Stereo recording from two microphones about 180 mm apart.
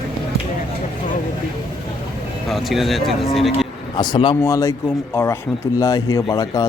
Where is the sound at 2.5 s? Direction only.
Centre (ahead or behind).